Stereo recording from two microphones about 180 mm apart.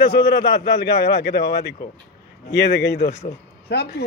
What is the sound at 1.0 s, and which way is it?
Speech, 65° left (ahead or behind).